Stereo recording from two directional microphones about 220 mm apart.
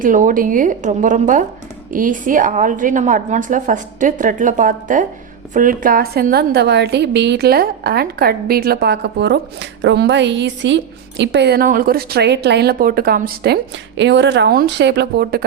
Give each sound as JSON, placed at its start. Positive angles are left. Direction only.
{"t": 0.0, "sound": "a woman's voice", "side_deg": -35}